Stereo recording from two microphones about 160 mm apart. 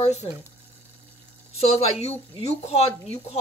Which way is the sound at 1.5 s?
40° left (ahead or behind).